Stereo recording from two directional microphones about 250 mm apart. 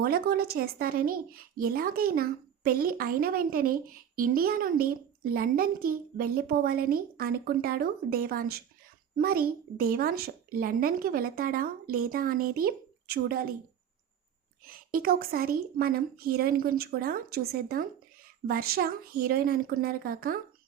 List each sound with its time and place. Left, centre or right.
0.0 s a woman's voice: right
14.6 s a woman's voice: right